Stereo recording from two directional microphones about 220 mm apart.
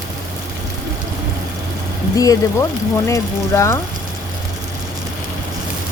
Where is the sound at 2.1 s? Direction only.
15° left (ahead or behind).